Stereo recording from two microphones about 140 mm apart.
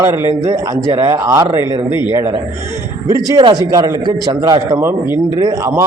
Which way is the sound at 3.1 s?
30° right (ahead or behind).